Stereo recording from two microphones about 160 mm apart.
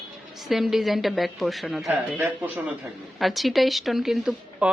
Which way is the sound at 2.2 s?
15° right (ahead or behind).